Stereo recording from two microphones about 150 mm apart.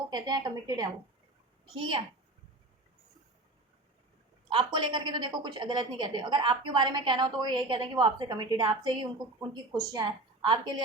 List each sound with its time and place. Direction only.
0.1 s a woman's voice: 30° right (ahead or behind)
4.4 s a woman's voice: 35° right (ahead or behind)